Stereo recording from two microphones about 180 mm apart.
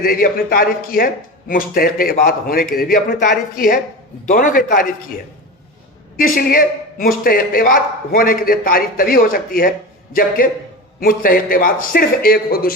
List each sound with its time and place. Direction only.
0.0 s a man's voice: 55° left (ahead or behind)
6.1 s a man's voice: 50° left (ahead or behind)